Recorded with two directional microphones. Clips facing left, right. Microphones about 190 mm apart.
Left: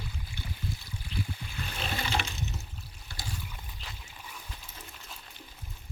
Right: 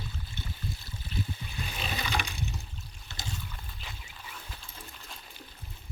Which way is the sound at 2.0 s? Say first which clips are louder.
Left 1 dB; 15° right (ahead or behind).